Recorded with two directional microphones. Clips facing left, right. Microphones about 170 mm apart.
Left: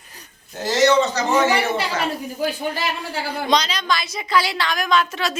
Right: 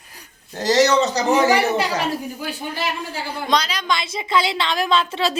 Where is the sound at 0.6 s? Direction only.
40° right (ahead or behind).